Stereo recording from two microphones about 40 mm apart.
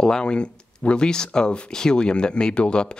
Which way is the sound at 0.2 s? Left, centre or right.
Left.